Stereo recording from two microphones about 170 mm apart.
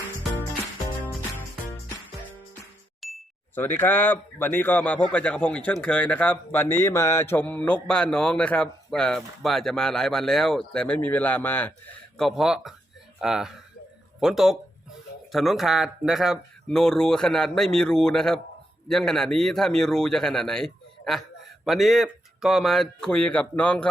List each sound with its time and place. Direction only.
3.0 s chink: centre (ahead or behind)
3.5 s a man's voice: 10° left (ahead or behind)